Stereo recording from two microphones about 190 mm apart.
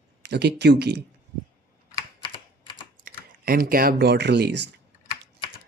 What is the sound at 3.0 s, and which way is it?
Speech, 50° right (ahead or behind).